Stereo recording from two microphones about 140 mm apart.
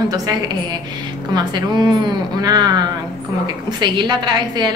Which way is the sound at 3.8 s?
30° right (ahead or behind).